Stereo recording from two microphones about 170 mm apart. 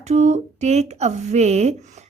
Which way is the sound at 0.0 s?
40° right (ahead or behind).